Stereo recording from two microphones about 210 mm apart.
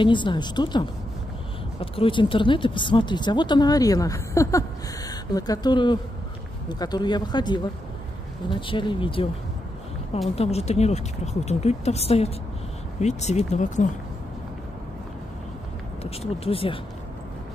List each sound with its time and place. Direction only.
0.0 s speech: 20° left (ahead or behind)
10.3 s speech: 30° left (ahead or behind)
16.0 s speech: 30° left (ahead or behind)